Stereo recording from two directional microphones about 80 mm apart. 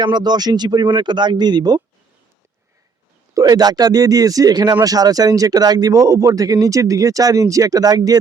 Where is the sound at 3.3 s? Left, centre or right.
Right.